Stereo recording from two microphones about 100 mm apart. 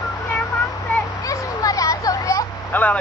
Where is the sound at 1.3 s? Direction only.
35° left (ahead or behind).